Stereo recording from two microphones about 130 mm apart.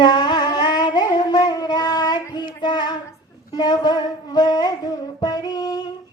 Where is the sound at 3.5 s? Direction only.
30° left (ahead or behind).